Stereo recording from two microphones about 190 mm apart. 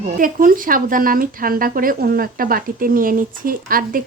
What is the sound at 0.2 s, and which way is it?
Speech, 45° right (ahead or behind).